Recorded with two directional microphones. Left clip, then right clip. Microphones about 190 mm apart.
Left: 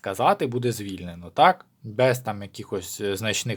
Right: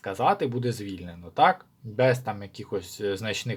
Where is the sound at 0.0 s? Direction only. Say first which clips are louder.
Left 2 dB; 30° left (ahead or behind).